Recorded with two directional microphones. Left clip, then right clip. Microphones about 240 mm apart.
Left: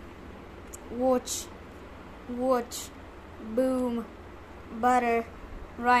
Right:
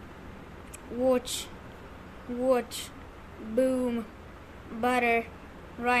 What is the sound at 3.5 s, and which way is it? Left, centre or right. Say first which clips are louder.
Speech: right 1 dB; centre.